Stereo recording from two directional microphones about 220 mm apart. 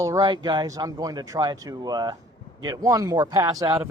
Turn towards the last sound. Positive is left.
turn(degrees=-15)  # may be behind; listen again after turning